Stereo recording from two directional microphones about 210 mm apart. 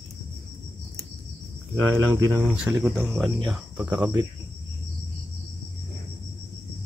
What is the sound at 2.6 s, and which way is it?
Cricket, 5° right (ahead or behind).